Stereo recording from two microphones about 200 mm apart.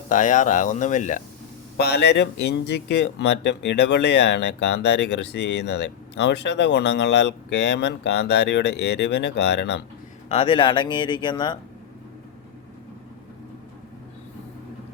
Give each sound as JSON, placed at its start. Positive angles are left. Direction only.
{"t": 0.1, "sound": "speech", "side_deg": 40}
{"t": 1.8, "sound": "speech", "side_deg": 55}
{"t": 10.2, "sound": "speech", "side_deg": 30}